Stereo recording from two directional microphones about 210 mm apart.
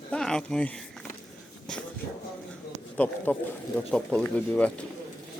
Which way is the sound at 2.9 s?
5° left (ahead or behind).